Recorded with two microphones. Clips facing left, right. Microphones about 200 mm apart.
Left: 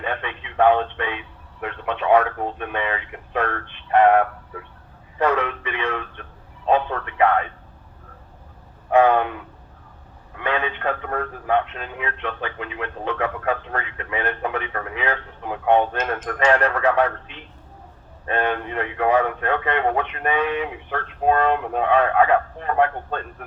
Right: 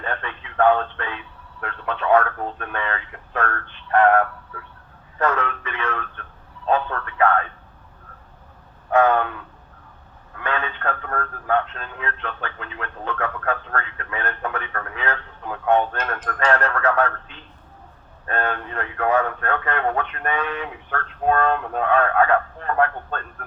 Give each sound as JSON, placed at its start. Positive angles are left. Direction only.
{"t": 0.0, "sound": "speech", "side_deg": 15}
{"t": 8.9, "sound": "a man's voice", "side_deg": 15}